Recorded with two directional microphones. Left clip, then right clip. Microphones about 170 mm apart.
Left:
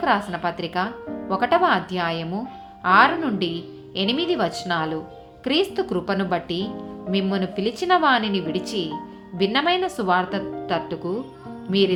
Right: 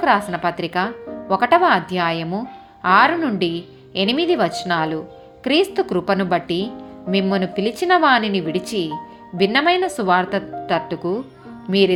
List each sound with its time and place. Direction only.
0.0 s speech: 30° right (ahead or behind)